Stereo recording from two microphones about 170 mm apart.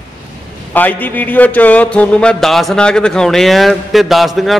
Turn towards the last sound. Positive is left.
turn(degrees=0)  # may be behind; listen again after turning